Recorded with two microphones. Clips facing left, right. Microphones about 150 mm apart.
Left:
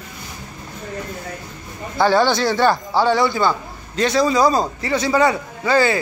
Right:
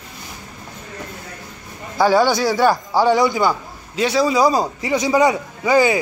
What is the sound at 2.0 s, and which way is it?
Speech, 10° right (ahead or behind).